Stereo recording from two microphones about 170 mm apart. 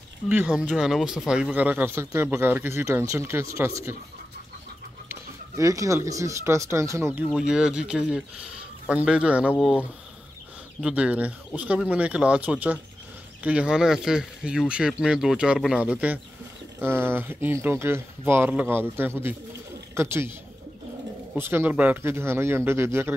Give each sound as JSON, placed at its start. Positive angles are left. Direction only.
{"t": 0.3, "sound": "a man's voice", "side_deg": -5}
{"t": 5.6, "sound": "a man's voice", "side_deg": -20}
{"t": 7.3, "sound": "speech", "side_deg": -5}
{"t": 10.8, "sound": "a man's voice", "side_deg": -5}
{"t": 21.4, "sound": "a man's voice", "side_deg": -15}